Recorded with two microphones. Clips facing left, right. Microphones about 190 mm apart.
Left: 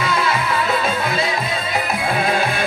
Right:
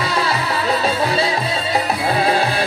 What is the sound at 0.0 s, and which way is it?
Music, 35° right (ahead or behind).